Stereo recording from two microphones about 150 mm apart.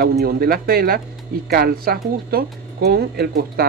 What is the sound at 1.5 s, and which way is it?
Speech, 90° right.